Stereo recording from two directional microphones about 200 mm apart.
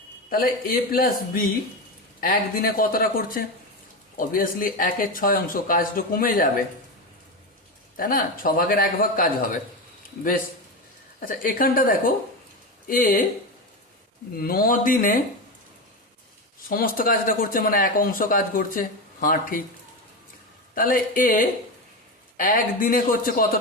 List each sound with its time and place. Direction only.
0.3 s speech: 45° left (ahead or behind)
7.9 s speech: 45° left (ahead or behind)
11.2 s speech: 45° left (ahead or behind)
14.3 s speech: 45° left (ahead or behind)
16.6 s speech: 45° left (ahead or behind)
20.7 s speech: 45° left (ahead or behind)